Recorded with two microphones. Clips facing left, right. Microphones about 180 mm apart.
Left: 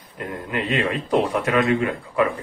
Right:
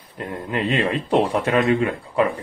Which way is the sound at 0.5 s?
30° right (ahead or behind).